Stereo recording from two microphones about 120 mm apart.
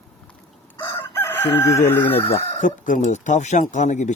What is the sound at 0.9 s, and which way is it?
Chicken, 20° left (ahead or behind).